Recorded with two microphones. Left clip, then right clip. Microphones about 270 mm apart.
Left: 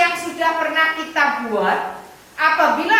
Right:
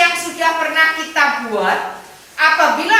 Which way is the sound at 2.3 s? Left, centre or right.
Centre.